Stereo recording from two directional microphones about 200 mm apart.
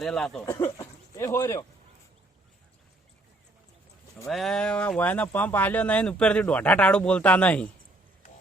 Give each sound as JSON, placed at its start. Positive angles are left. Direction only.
{"t": 0.0, "sound": "speech", "side_deg": 0}
{"t": 4.3, "sound": "speech", "side_deg": 0}